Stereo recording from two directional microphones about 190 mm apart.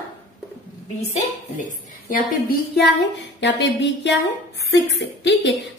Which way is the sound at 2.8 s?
65° left (ahead or behind).